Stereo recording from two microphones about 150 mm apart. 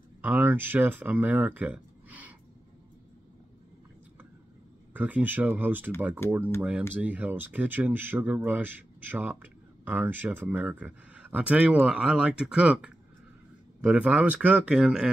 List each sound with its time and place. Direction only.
0.2 s speech: 10° right (ahead or behind)
4.9 s speech: 10° right (ahead or behind)
6.2 s speech: 15° left (ahead or behind)
6.9 s speech: 10° right (ahead or behind)